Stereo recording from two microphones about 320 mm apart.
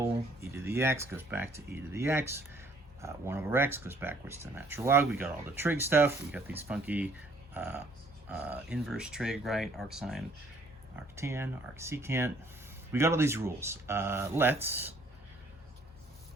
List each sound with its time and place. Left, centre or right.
0.5 s speech: centre